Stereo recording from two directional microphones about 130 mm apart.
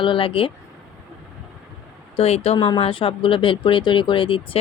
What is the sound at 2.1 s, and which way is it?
Speech, 50° left (ahead or behind).